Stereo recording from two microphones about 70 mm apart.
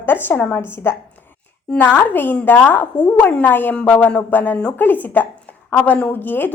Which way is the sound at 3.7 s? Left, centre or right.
Centre.